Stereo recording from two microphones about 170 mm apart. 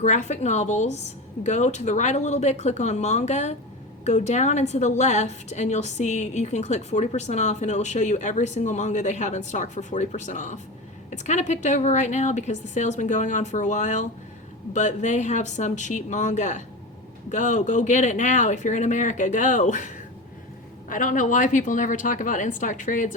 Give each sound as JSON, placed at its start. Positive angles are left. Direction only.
{"t": 0.0, "sound": "a woman's voice", "side_deg": 45}
{"t": 20.9, "sound": "a woman's voice", "side_deg": 50}